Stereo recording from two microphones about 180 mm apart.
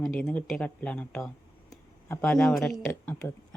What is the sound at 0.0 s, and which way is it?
Speech, 5° left (ahead or behind).